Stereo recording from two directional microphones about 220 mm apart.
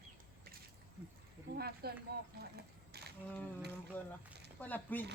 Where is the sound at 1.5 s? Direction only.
45° right (ahead or behind).